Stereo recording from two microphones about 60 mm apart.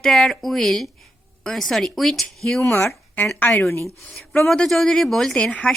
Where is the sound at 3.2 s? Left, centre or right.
Left.